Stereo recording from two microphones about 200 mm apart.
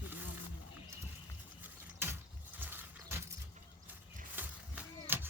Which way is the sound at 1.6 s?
10° right (ahead or behind).